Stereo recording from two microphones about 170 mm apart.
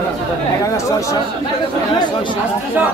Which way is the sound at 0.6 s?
20° left (ahead or behind).